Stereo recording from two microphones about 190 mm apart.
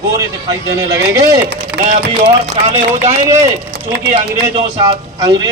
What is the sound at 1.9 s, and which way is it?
Speech, 35° right (ahead or behind).